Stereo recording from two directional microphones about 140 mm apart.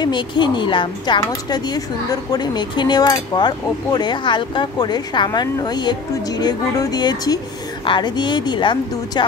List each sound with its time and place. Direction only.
0.0 s a woman's voice: 35° left (ahead or behind)